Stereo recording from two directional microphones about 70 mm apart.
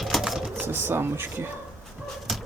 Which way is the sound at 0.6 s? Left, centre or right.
Right.